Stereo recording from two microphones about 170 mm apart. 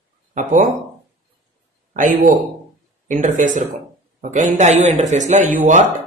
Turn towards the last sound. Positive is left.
turn(degrees=-50)  # may be behind; listen again after turning